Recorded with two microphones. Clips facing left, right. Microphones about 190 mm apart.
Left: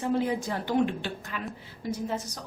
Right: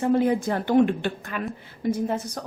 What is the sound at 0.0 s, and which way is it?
A woman's voice, 55° right (ahead or behind).